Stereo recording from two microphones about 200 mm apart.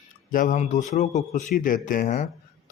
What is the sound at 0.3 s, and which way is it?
A man's voice, 40° left (ahead or behind).